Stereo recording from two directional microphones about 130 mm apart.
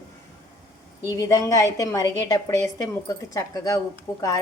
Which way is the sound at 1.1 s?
25° left (ahead or behind).